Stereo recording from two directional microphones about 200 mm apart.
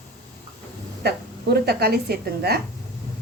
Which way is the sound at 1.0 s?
55° right (ahead or behind).